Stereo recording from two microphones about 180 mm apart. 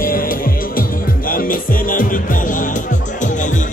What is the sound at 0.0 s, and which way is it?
Music, 55° left (ahead or behind).